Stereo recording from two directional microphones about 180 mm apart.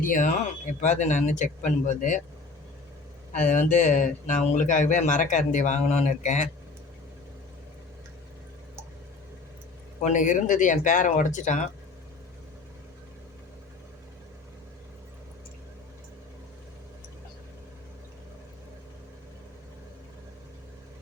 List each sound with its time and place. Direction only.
0.0 s speech: 45° left (ahead or behind)
3.3 s speech: 45° left (ahead or behind)
10.0 s speech: 45° left (ahead or behind)